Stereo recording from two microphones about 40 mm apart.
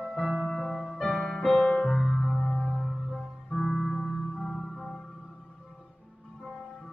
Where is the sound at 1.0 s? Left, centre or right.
Centre.